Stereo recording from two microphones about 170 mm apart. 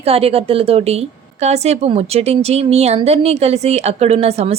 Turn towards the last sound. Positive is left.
turn(degrees=-35)  # may be behind; listen again after turning